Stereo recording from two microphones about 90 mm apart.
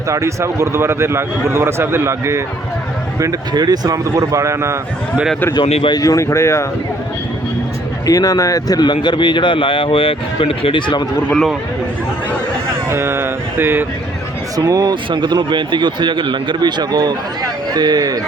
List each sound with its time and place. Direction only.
0.1 s a man's voice: 35° right (ahead or behind)
3.5 s speech: 50° right (ahead or behind); by 4.8 s 30° right (ahead or behind)
5.5 s speech: 55° left (ahead or behind)
6.0 s speech: 40° left (ahead or behind)
8.0 s speech: 40° left (ahead or behind); by 11.0 s 65° left (ahead or behind)
11.3 s speech: centre (ahead or behind)
12.9 s a man's voice: 30° right (ahead or behind)
14.5 s speech: 40° right (ahead or behind)